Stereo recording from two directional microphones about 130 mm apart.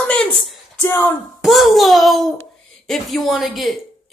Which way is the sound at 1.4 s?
Centre (ahead or behind).